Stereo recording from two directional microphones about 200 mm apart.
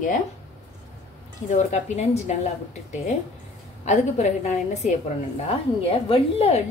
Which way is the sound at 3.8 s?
35° left (ahead or behind).